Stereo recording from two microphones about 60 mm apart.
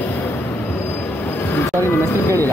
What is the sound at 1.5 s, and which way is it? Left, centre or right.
Music, left.